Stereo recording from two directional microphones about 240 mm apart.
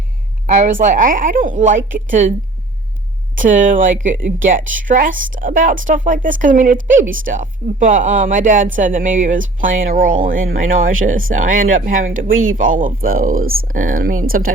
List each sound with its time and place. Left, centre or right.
0.4 s a woman's voice: right
3.3 s a woman's voice: right